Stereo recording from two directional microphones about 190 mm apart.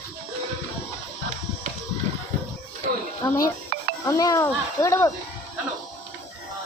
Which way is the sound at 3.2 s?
20° left (ahead or behind).